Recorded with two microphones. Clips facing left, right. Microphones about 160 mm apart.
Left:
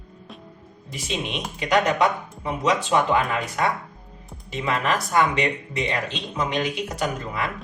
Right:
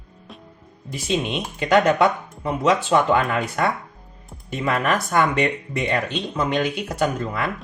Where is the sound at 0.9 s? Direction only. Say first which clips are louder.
Right 5 dB; 55° right (ahead or behind).